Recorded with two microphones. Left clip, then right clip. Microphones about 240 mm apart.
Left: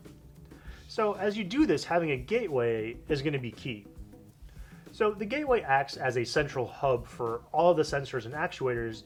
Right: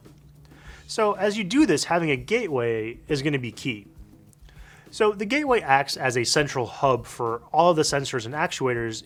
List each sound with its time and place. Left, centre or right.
0.7 s speech: right
4.9 s speech: right